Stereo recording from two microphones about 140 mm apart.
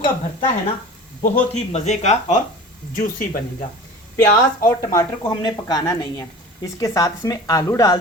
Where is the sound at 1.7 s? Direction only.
55° left (ahead or behind).